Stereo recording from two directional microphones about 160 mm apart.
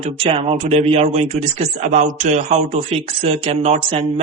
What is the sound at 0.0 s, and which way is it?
Speech, 40° right (ahead or behind).